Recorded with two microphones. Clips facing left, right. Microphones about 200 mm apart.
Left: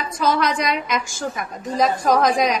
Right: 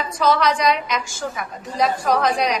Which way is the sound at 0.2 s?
50° left (ahead or behind).